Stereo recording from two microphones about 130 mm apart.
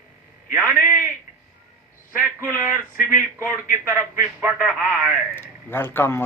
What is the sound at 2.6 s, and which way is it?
A man's voice, 15° right (ahead or behind).